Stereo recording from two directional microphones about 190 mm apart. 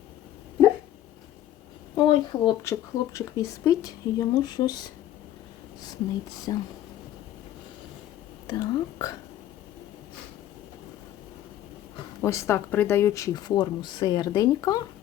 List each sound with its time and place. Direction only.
2.0 s speech: 25° left (ahead or behind)
6.5 s speech: 20° left (ahead or behind)
8.4 s speech: 20° left (ahead or behind)
12.2 s speech: 15° left (ahead or behind)